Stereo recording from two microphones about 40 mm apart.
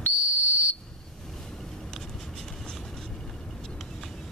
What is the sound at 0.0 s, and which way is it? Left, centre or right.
Whistle, left.